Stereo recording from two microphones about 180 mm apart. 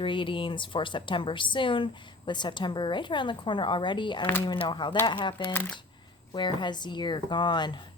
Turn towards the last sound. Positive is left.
turn(degrees=25)  # may be behind; listen again after turning